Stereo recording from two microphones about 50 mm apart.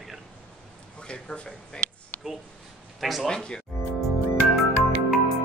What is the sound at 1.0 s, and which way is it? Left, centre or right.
Speech, centre.